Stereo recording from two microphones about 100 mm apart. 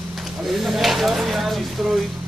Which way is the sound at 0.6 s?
Centre (ahead or behind).